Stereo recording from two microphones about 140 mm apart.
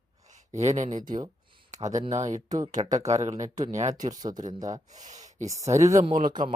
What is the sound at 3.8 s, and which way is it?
Speech, 55° right (ahead or behind).